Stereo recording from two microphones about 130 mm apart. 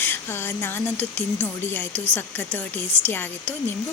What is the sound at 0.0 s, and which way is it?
Speech, 20° left (ahead or behind).